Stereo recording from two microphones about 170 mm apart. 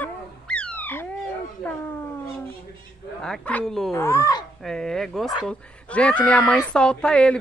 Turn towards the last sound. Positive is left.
turn(degrees=5)  # may be behind; listen again after turning